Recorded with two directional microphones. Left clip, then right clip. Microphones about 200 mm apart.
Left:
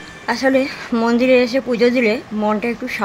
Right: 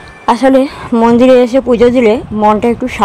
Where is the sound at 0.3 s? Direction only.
30° right (ahead or behind).